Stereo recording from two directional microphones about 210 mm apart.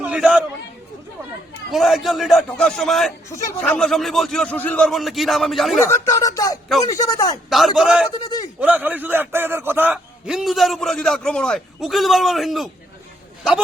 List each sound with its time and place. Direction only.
0.0 s chatter: 5° right (ahead or behind)
1.7 s a man's voice: centre (ahead or behind)
3.2 s a man's voice: 15° left (ahead or behind)
5.9 s speech: 15° left (ahead or behind)
7.5 s a man's voice: centre (ahead or behind)
8.2 s a sound: 20° left (ahead or behind)
8.6 s a man's voice: 10° right (ahead or behind)